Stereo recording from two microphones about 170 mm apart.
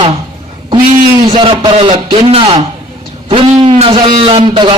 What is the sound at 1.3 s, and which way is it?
A man's voice, 30° right (ahead or behind).